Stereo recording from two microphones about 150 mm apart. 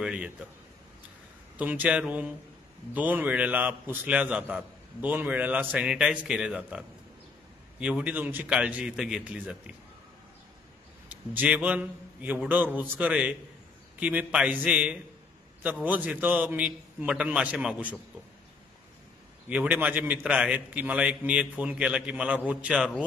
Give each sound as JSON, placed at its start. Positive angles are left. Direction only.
{"t": 0.0, "sound": "a man's voice", "side_deg": -5}
{"t": 1.6, "sound": "a man's voice", "side_deg": -10}
{"t": 7.8, "sound": "a man's voice", "side_deg": -10}
{"t": 11.1, "sound": "a man's voice", "side_deg": -10}
{"t": 19.5, "sound": "a man's voice", "side_deg": -10}